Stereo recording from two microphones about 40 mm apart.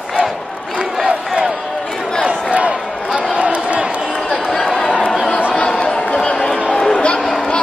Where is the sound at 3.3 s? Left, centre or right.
Right.